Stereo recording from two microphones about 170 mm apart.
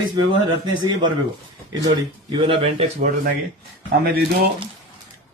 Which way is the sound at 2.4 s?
35° right (ahead or behind).